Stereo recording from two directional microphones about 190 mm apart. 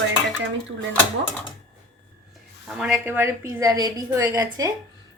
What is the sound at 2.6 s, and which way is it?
A woman's voice, 5° right (ahead or behind).